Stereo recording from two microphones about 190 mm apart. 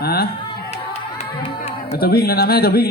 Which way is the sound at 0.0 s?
55° left (ahead or behind).